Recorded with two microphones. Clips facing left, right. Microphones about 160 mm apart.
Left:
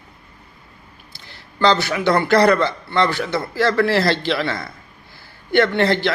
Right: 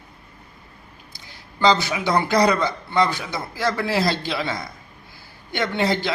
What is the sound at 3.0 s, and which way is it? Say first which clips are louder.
Speech: left 4 dB; 70° left (ahead or behind).